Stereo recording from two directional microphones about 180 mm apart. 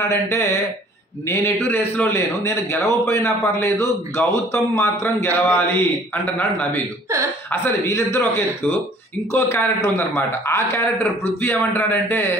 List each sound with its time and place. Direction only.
0.1 s a man's voice: 15° left (ahead or behind)
1.7 s a man's voice: 10° left (ahead or behind)
7.8 s a man's voice: 15° left (ahead or behind)
9.3 s a man's voice: 15° left (ahead or behind)